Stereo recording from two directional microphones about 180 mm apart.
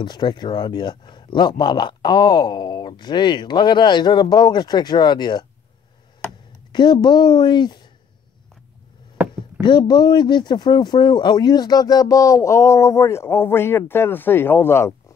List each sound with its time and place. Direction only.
0.0 s speech: 25° left (ahead or behind)
6.7 s speech: 25° left (ahead or behind)
9.6 s speech: 25° left (ahead or behind)